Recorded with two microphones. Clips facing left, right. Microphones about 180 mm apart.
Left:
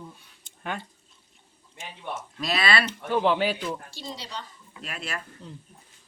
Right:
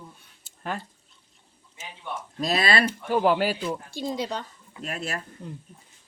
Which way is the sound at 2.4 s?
40° right (ahead or behind).